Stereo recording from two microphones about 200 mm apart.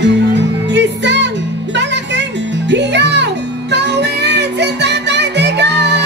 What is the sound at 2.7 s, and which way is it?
Music, 60° right (ahead or behind).